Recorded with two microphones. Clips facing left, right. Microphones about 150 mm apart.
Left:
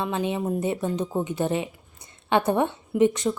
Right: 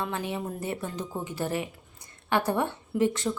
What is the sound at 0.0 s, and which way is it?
Speech, 20° left (ahead or behind).